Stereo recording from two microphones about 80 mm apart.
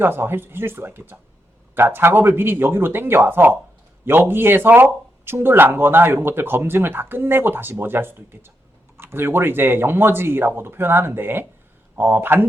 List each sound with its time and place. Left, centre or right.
0.0 s speech: right